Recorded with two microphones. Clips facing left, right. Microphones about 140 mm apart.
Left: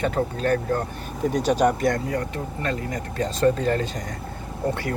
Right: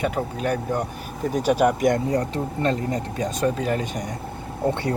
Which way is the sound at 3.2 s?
10° right (ahead or behind).